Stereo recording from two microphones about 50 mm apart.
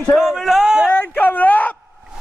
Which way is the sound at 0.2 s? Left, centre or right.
Centre.